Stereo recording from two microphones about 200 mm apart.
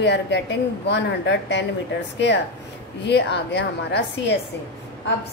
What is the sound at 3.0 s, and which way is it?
A woman's voice, 60° left (ahead or behind).